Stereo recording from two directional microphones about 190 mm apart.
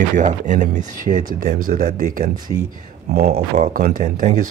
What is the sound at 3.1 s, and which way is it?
Speech, 55° right (ahead or behind).